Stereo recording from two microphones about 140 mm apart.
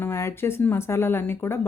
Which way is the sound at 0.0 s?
20° left (ahead or behind).